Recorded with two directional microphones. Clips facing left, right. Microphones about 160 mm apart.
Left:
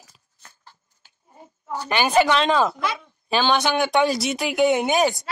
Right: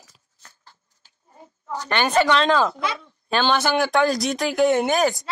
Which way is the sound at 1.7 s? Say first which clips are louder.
Even; 10° left (ahead or behind).